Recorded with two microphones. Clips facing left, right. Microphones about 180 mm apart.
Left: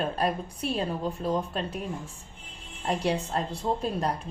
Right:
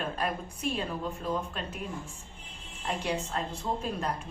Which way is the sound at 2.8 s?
35° left (ahead or behind).